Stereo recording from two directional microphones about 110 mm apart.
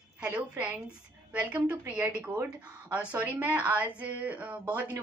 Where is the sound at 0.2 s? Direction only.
10° right (ahead or behind).